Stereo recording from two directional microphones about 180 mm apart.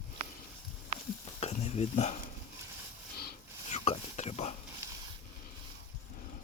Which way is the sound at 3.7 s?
40° left (ahead or behind).